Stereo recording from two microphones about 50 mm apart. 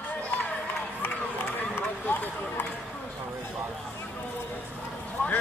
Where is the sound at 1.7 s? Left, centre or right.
Left.